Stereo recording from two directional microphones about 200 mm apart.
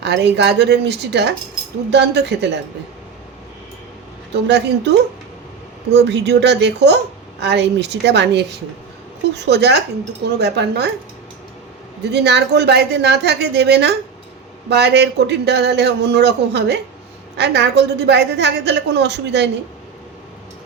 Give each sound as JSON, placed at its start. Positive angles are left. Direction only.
{"t": 0.0, "sound": "a woman's voice", "side_deg": -60}
{"t": 4.4, "sound": "a woman's voice", "side_deg": -60}
{"t": 12.1, "sound": "a woman's voice", "side_deg": -55}